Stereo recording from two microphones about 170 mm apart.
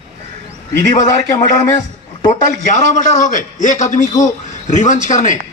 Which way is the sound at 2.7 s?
45° left (ahead or behind).